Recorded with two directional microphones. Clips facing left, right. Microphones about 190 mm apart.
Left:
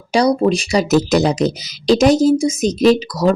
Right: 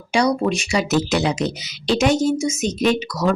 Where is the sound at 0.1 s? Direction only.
35° left (ahead or behind).